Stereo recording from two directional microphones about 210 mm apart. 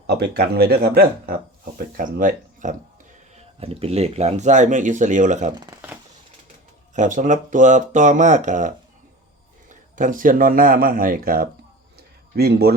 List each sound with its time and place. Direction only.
0.1 s speech: 50° right (ahead or behind)
3.3 s speech: 30° right (ahead or behind)
5.5 s speech: 15° right (ahead or behind)
6.9 s speech: 35° right (ahead or behind)
11.9 s a sound: 50° right (ahead or behind)